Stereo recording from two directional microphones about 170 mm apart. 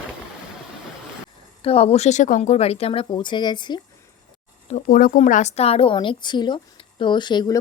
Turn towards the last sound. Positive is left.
turn(degrees=25)  # may be behind; listen again after turning